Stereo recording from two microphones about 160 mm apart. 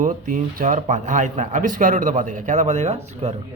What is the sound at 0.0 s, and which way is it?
Speech, 55° right (ahead or behind).